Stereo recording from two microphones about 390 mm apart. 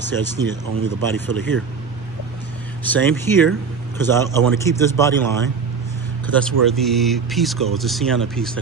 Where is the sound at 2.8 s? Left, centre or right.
Centre.